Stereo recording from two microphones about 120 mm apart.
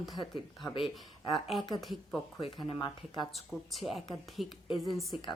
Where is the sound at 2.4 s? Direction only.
50° left (ahead or behind).